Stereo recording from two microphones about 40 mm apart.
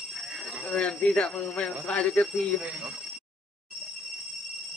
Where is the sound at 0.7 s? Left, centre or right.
Left.